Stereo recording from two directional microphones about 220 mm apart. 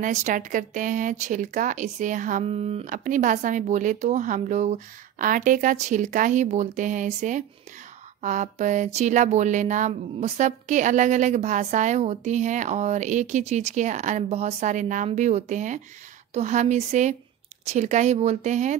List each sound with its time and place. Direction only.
0.0 s a woman's voice: 35° right (ahead or behind)